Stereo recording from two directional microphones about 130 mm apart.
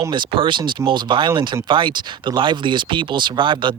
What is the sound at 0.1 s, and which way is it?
Speech, 40° right (ahead or behind).